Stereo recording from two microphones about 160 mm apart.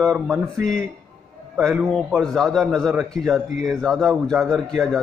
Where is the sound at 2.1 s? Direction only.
Centre (ahead or behind).